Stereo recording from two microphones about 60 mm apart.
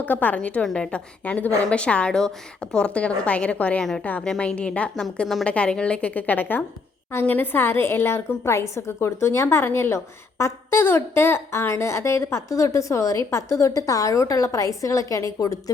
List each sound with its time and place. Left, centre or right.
0.0 s a woman's voice: left